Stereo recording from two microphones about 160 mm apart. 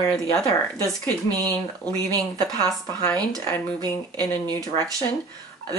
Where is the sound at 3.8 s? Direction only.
25° right (ahead or behind).